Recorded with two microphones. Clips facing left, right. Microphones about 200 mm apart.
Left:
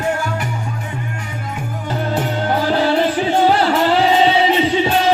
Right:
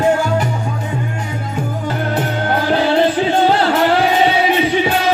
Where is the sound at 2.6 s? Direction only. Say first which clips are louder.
Right 2 dB; 20° right (ahead or behind).